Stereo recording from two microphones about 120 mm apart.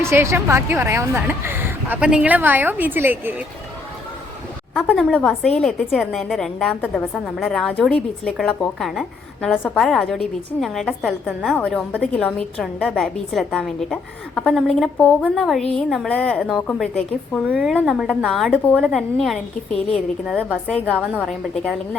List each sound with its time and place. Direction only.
0.0 s speech: 20° right (ahead or behind)
5.1 s a woman's voice: 5° left (ahead or behind)
11.3 s speech: 5° right (ahead or behind)
11.9 s a woman's voice: 5° left (ahead or behind)
15.4 s a woman's voice: centre (ahead or behind)
17.5 s a woman's voice: 10° right (ahead or behind)